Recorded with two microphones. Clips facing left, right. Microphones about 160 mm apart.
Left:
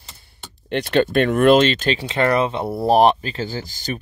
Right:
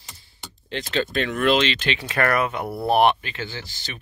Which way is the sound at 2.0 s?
25° left (ahead or behind).